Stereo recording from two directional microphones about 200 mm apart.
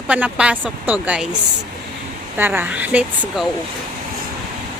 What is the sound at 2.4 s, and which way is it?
Speech, 10° right (ahead or behind).